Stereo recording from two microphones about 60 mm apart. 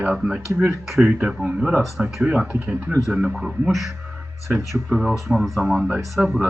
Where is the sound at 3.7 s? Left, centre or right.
Centre.